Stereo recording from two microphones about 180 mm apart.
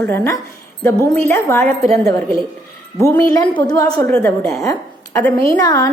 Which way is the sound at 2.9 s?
15° left (ahead or behind).